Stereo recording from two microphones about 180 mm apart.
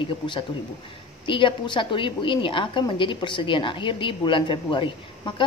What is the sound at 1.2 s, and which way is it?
A woman's voice, 25° left (ahead or behind).